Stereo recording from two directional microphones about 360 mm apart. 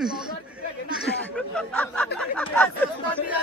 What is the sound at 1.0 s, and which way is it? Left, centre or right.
A man's voice, centre.